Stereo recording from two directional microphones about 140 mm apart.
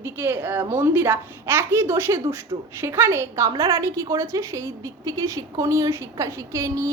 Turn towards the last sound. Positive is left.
turn(degrees=-25)  # may be behind; listen again after turning